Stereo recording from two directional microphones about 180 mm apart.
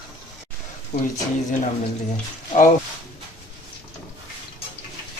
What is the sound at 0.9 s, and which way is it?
Speech, 40° left (ahead or behind).